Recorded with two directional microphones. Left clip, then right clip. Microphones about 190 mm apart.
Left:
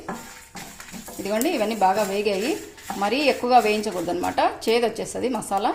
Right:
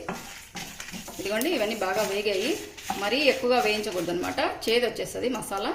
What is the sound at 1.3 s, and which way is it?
Speech, 50° left (ahead or behind).